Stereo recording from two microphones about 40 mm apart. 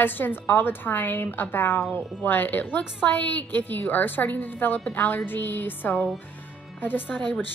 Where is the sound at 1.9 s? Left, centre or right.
Left.